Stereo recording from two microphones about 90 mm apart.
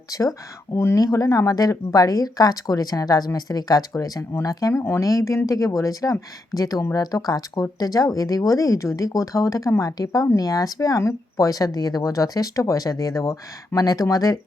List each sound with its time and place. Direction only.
0.1 s speech: 40° left (ahead or behind)